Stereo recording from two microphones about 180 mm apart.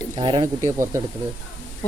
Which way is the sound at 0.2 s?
25° right (ahead or behind).